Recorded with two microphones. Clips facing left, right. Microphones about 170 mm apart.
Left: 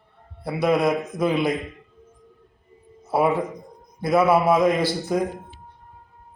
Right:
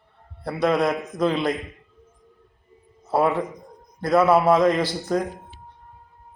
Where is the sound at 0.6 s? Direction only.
5° left (ahead or behind).